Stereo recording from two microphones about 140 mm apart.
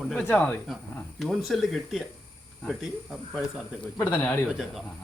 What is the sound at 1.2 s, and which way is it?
Speech, centre (ahead or behind).